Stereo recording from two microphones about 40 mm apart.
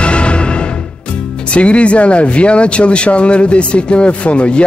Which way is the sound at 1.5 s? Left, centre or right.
Left.